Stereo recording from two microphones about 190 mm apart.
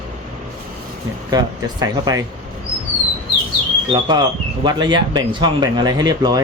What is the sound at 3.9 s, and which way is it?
Speech, 20° right (ahead or behind).